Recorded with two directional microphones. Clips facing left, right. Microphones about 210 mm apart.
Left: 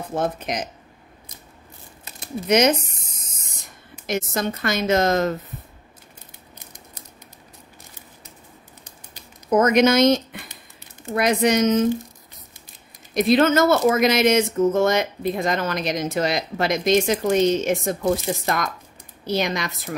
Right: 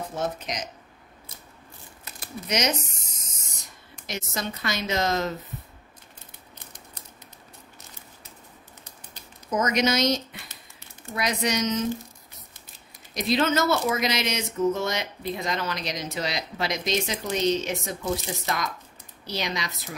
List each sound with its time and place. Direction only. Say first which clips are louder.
0.1 s speech: left 9 dB; 55° left (ahead or behind)
2.4 s speech: left 9 dB; 55° left (ahead or behind)
4.0 s speech: left 8 dB; 50° left (ahead or behind)
9.5 s speech: left 8 dB; 55° left (ahead or behind)
13.1 s speech: left 7 dB; 55° left (ahead or behind)